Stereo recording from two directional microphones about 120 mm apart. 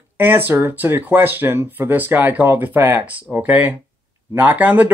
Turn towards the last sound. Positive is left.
turn(degrees=-15)  # may be behind; listen again after turning